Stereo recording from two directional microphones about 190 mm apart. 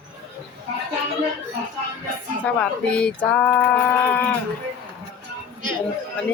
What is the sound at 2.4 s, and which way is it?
Speech, 5° left (ahead or behind).